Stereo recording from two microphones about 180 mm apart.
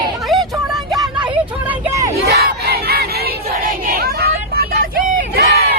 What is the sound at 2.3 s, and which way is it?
Battle cry, 65° right (ahead or behind).